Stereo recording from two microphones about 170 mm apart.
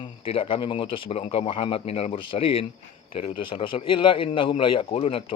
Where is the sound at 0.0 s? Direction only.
30° left (ahead or behind).